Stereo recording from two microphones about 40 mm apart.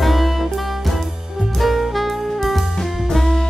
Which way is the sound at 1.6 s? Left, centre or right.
Centre.